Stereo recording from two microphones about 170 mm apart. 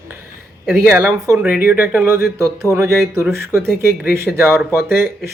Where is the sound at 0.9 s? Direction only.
15° right (ahead or behind).